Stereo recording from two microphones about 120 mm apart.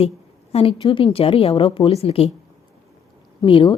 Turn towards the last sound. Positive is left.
turn(degrees=45)  # may be behind; listen again after turning